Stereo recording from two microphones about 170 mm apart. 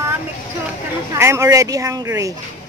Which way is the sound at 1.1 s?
15° right (ahead or behind).